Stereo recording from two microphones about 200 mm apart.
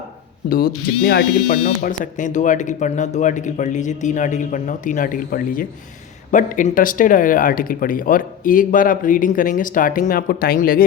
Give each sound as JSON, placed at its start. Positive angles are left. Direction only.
{"t": 0.4, "sound": "speech", "side_deg": 50}